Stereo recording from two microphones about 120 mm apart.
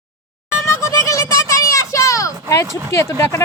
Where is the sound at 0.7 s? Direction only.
25° left (ahead or behind).